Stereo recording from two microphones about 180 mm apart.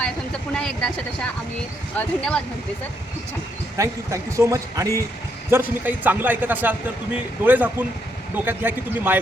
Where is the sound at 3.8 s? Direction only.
15° right (ahead or behind).